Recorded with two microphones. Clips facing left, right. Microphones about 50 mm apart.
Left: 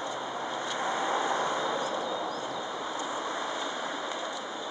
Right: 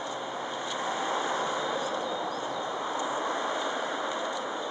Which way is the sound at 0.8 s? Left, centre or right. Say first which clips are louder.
Left 1 dB; centre.